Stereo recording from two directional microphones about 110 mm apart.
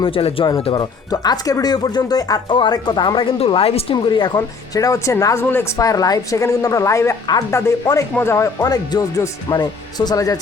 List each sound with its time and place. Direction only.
0.0 s speech: 60° left (ahead or behind)
1.1 s speech: 35° left (ahead or behind); by 3.9 s 60° left (ahead or behind)
4.0 s speech: 45° left (ahead or behind)
4.4 s speech: 30° left (ahead or behind)